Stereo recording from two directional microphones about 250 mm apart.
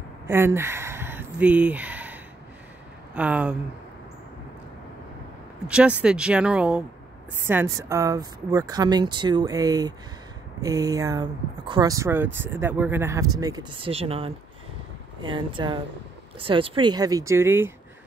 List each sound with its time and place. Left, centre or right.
0.3 s a sound: centre
3.2 s speech: centre
5.7 s speech: centre